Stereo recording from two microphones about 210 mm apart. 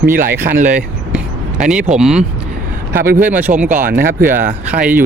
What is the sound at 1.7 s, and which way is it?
Speech, 5° right (ahead or behind).